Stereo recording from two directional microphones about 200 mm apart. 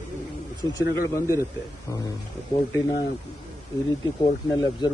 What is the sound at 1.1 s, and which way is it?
Speech, 15° left (ahead or behind).